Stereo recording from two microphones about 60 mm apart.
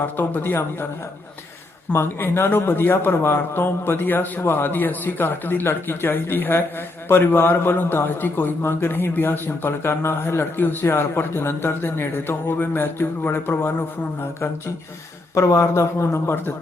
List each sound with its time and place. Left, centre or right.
0.0 s a man's voice: left
1.9 s a man's voice: left
15.4 s speech: left